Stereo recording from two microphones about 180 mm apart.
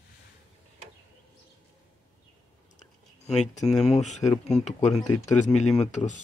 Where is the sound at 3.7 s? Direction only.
Centre (ahead or behind).